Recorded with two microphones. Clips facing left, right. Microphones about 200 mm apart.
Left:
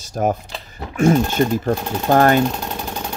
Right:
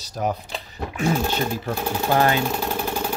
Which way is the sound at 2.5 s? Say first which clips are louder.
Right 2 dB; 10° right (ahead or behind).